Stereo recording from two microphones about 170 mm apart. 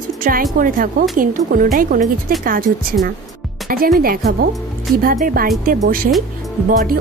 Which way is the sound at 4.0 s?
60° right (ahead or behind).